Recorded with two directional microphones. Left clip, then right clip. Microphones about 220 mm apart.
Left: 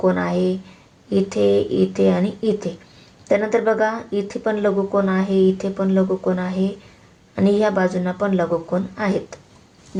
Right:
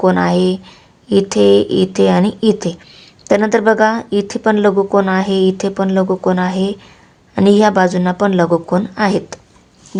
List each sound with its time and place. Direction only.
0.0 s speech: 40° right (ahead or behind)